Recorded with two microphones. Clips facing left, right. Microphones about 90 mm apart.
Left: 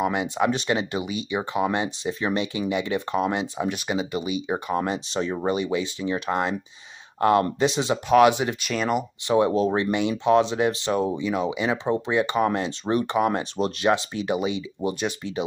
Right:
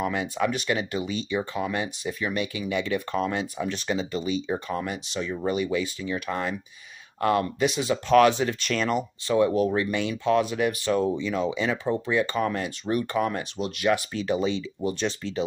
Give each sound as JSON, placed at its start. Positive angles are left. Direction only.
{"t": 0.0, "sound": "speech", "side_deg": 20}
{"t": 4.7, "sound": "speech", "side_deg": 30}
{"t": 8.1, "sound": "speech", "side_deg": 15}
{"t": 9.3, "sound": "speech", "side_deg": 25}
{"t": 13.4, "sound": "speech", "side_deg": 35}